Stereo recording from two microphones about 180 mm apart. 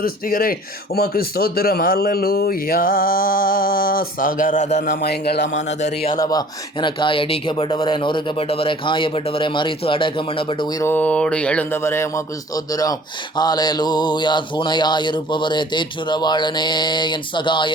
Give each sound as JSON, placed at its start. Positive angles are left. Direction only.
{"t": 0.0, "sound": "a man's voice", "side_deg": 50}
{"t": 5.0, "sound": "a man's voice", "side_deg": 65}
{"t": 5.5, "sound": "speech", "side_deg": 40}
{"t": 6.1, "sound": "speech", "side_deg": 20}
{"t": 10.8, "sound": "speech", "side_deg": 10}